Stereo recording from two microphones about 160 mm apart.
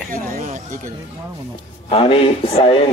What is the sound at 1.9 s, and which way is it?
Speech, 35° left (ahead or behind).